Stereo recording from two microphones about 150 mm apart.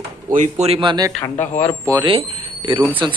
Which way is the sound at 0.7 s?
30° right (ahead or behind).